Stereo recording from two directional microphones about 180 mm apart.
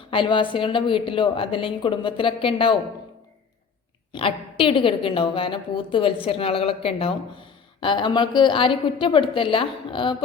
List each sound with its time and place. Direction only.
0.1 s a woman's voice: 25° left (ahead or behind)
4.1 s a woman's voice: 30° left (ahead or behind)